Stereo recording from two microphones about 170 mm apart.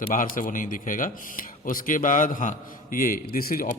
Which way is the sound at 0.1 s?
55° left (ahead or behind).